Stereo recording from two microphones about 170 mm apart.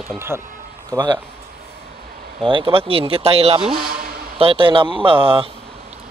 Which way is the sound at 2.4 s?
30° right (ahead or behind).